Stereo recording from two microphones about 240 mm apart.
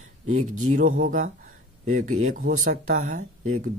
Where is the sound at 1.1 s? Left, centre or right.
Right.